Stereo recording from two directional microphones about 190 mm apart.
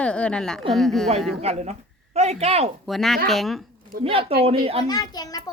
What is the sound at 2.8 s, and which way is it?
Speech, centre (ahead or behind).